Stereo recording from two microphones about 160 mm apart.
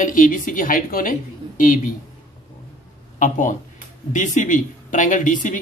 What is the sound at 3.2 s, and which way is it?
Speech, 55° left (ahead or behind).